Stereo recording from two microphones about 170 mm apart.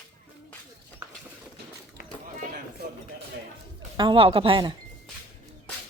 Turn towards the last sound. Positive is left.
turn(degrees=-30)  # may be behind; listen again after turning